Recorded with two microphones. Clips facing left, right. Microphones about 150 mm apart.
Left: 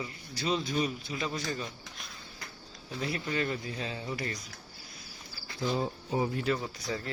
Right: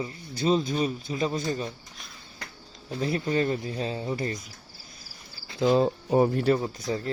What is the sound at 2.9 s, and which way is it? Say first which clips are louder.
Speech: right 7 dB; 30° right (ahead or behind).